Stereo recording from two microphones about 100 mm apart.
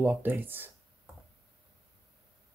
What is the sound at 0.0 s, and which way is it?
Speech, 20° right (ahead or behind).